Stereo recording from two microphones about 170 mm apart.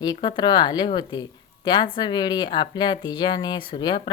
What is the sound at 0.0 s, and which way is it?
Speech, 25° left (ahead or behind).